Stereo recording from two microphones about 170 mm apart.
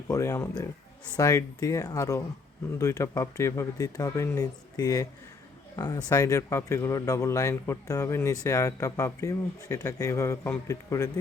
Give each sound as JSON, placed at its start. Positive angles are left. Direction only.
{"t": 0.1, "sound": "speech", "side_deg": 15}